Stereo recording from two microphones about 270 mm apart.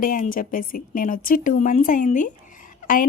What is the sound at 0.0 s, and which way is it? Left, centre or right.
A woman's voice, left.